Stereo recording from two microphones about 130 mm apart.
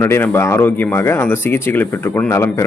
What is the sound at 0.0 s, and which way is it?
A man's voice, 20° left (ahead or behind).